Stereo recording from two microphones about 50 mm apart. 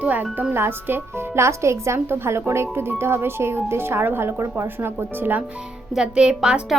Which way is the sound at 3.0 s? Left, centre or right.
Right.